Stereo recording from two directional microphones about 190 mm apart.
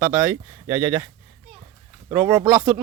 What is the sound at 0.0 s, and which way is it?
A man's voice, 10° right (ahead or behind).